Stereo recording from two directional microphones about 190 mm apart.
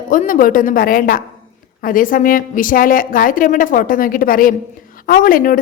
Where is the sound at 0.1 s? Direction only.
45° left (ahead or behind).